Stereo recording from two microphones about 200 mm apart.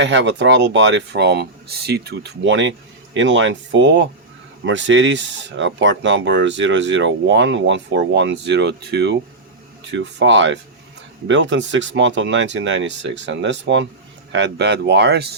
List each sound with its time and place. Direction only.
0.0 s speech: 65° right (ahead or behind)